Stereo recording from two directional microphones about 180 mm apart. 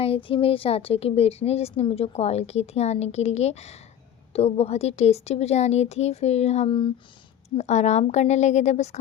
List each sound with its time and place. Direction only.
0.0 s a woman's voice: 30° left (ahead or behind)
7.5 s a woman's voice: 40° left (ahead or behind)